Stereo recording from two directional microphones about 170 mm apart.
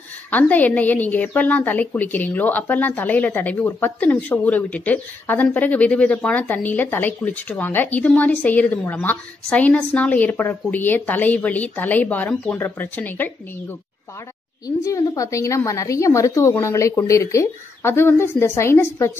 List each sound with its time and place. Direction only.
0.3 s a woman's voice: 10° left (ahead or behind)
14.8 s a woman's voice: 20° left (ahead or behind)